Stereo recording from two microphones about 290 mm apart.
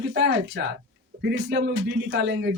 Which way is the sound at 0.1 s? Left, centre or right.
Right.